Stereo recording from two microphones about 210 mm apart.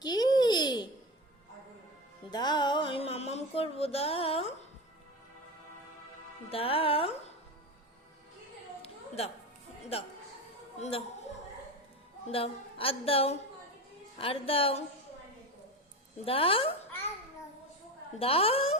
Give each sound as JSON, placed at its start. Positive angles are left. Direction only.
{"t": 0.0, "sound": "babbling", "side_deg": 20}
{"t": 2.3, "sound": "music", "side_deg": 20}
{"t": 6.5, "sound": "a woman's voice", "side_deg": 25}
{"t": 8.8, "sound": "a sound", "side_deg": 30}
{"t": 10.8, "sound": "a woman's voice", "side_deg": 30}
{"t": 12.3, "sound": "a woman's voice", "side_deg": 25}
{"t": 16.2, "sound": "a woman's voice", "side_deg": 25}
{"t": 18.2, "sound": "a woman's voice", "side_deg": 30}